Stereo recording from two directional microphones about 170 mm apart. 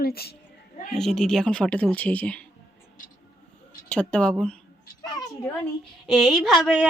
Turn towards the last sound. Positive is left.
turn(degrees=0)  # may be behind; listen again after turning